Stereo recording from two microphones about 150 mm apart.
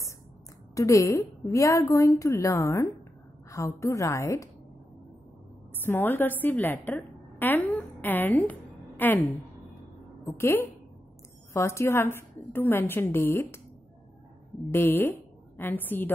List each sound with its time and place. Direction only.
0.7 s a woman's voice: 20° left (ahead or behind)
5.8 s a woman's voice: 15° left (ahead or behind)
14.7 s a woman's voice: 15° left (ahead or behind)